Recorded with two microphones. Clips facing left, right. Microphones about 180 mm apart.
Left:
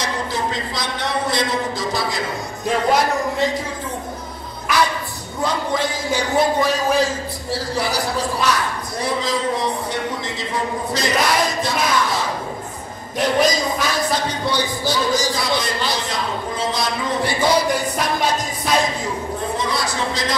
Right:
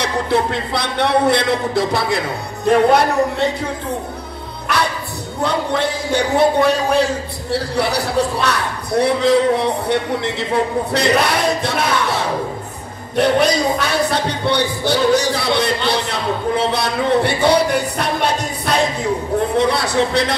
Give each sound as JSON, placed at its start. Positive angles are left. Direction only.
{"t": 0.0, "sound": "speech", "side_deg": -65}
{"t": 5.4, "sound": "speech", "side_deg": -65}